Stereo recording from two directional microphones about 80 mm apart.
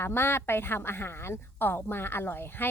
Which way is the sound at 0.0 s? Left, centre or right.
Left.